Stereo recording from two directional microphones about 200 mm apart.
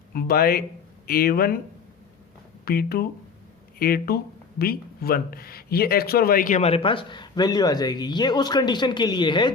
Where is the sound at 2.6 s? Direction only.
50° left (ahead or behind).